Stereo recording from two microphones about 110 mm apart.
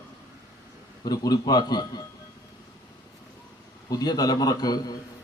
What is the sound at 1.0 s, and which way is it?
A man's voice, 35° left (ahead or behind).